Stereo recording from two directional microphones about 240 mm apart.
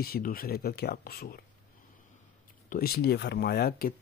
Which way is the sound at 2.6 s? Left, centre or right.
Left.